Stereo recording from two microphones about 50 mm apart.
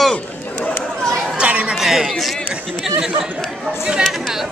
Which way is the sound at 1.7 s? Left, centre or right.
Centre.